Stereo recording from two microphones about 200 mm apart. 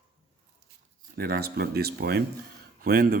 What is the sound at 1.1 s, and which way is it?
Speech, 50° right (ahead or behind).